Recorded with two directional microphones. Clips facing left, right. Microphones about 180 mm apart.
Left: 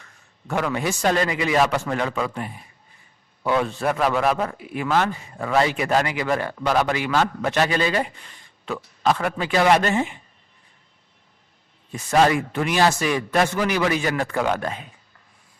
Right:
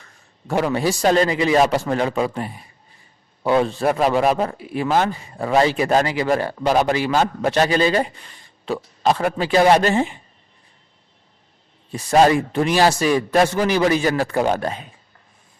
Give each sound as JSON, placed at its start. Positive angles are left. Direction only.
{"t": 0.0, "sound": "speech", "side_deg": -35}
{"t": 11.9, "sound": "speech", "side_deg": -35}